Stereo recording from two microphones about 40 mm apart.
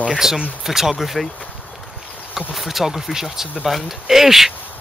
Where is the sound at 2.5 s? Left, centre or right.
Centre.